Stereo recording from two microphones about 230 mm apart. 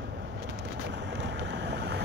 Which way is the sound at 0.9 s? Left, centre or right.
Right.